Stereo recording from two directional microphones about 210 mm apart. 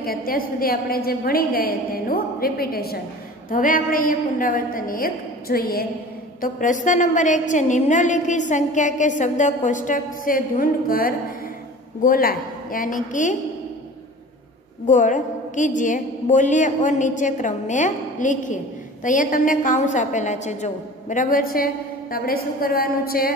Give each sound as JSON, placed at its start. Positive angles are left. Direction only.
{"t": 0.0, "sound": "a woman's voice", "side_deg": 45}
{"t": 14.9, "sound": "a woman's voice", "side_deg": 35}